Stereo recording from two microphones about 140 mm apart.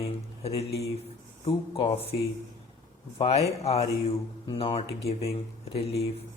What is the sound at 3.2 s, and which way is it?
Speech, 45° left (ahead or behind).